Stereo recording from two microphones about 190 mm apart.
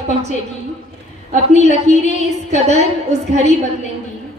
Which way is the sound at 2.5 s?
35° right (ahead or behind).